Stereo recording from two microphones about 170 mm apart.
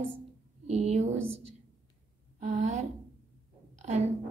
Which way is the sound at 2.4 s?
45° right (ahead or behind).